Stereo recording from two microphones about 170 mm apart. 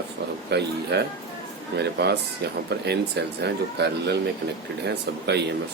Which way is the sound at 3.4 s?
80° right.